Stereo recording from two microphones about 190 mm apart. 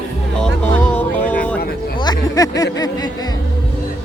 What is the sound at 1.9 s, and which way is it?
Music, 20° left (ahead or behind).